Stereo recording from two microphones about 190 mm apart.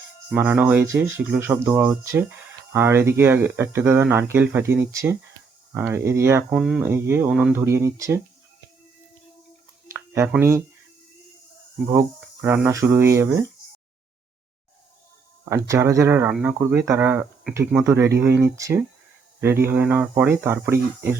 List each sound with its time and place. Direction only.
0.3 s speech: 10° right (ahead or behind)
10.3 s speech: 15° right (ahead or behind)
11.9 s speech: 15° right (ahead or behind)
15.4 s speech: 15° right (ahead or behind)